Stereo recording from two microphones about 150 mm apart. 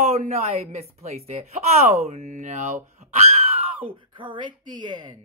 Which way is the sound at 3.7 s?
35° right (ahead or behind).